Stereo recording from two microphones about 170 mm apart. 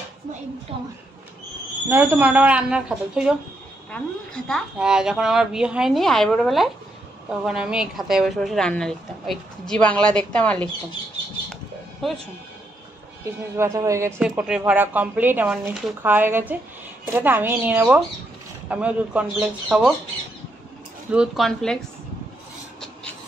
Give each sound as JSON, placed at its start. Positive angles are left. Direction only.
{"t": 0.7, "sound": "a woman's voice", "side_deg": -35}
{"t": 1.9, "sound": "a woman's voice", "side_deg": -10}
{"t": 13.2, "sound": "speech", "side_deg": -15}
{"t": 14.2, "sound": "a woman's voice", "side_deg": -5}
{"t": 21.1, "sound": "a woman's voice", "side_deg": -5}